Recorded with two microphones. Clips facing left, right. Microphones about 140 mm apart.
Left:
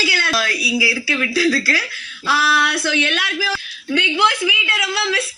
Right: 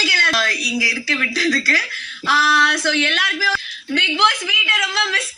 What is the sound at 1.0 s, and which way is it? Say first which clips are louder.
Speech: left 3 dB; 10° left (ahead or behind).